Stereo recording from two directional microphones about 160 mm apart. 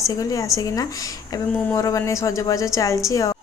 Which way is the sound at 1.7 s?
20° left (ahead or behind).